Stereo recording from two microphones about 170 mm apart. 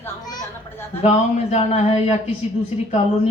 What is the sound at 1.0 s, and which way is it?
Speech, 40° left (ahead or behind).